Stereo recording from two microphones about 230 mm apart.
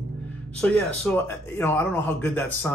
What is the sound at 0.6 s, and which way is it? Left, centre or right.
Speech, centre.